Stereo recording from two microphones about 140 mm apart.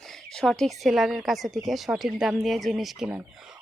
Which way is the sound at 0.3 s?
5° left (ahead or behind).